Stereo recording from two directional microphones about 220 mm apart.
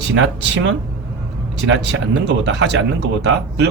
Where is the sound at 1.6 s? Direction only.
60° right (ahead or behind).